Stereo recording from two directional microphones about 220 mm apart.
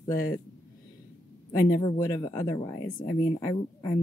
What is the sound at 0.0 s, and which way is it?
Speech, 15° left (ahead or behind).